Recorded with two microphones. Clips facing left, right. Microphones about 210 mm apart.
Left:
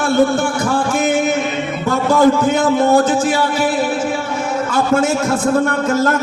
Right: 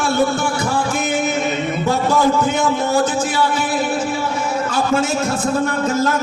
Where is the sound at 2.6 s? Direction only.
55° left (ahead or behind).